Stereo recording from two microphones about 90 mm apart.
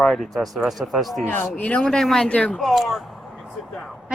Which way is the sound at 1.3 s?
15° left (ahead or behind).